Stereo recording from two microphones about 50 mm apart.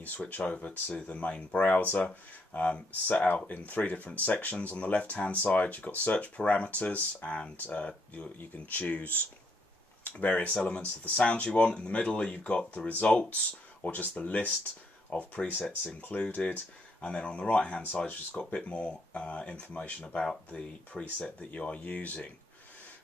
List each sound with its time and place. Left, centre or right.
0.0 s speech: left